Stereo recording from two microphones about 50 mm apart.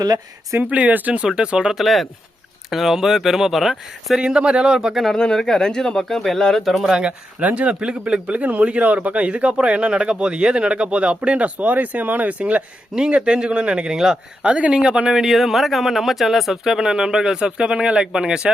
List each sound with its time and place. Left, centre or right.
0.6 s speech: right
1.3 s speech: centre
1.7 s speech: centre
4.2 s speech: centre
5.1 s speech: centre
6.9 s speech: centre
14.4 s speech: right
15.2 s speech: centre